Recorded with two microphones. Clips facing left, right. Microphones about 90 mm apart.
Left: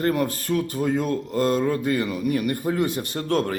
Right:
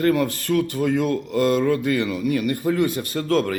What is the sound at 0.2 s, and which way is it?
Speech, 40° left (ahead or behind).